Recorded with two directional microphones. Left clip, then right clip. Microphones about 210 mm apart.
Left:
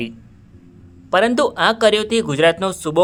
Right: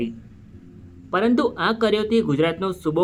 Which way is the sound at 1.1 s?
40° left (ahead or behind).